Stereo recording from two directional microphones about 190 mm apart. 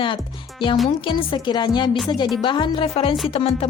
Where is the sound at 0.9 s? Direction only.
25° left (ahead or behind).